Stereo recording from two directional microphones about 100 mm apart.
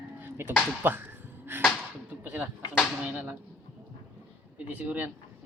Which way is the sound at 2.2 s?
20° right (ahead or behind).